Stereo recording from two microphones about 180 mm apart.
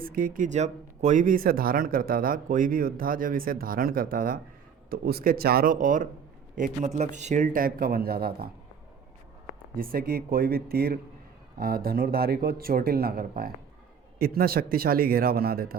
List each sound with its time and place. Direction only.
0.0 s speech: 50° right (ahead or behind)
9.7 s speech: 55° right (ahead or behind)